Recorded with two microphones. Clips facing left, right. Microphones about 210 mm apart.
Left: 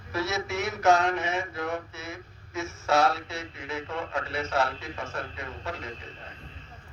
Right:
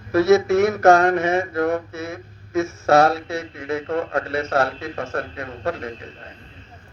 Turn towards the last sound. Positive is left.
turn(degrees=-55)  # may be behind; listen again after turning